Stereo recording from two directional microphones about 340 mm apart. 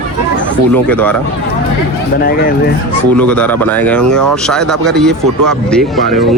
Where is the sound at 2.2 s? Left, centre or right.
Left.